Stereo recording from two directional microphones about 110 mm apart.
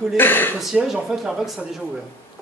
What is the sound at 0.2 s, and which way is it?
Speech, 20° left (ahead or behind).